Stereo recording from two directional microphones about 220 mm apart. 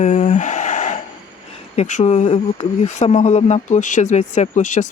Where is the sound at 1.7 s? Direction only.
30° left (ahead or behind).